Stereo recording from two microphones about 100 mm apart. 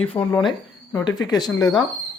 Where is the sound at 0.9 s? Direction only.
40° left (ahead or behind).